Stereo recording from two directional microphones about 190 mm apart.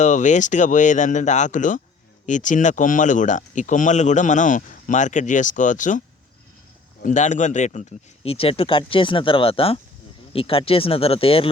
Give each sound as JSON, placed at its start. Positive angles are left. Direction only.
{"t": 0.0, "sound": "speech", "side_deg": 40}
{"t": 7.0, "sound": "speech", "side_deg": 40}